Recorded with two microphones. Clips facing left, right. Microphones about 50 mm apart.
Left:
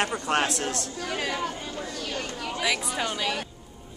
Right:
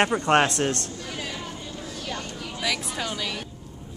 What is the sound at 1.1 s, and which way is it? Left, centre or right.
Chatter, left.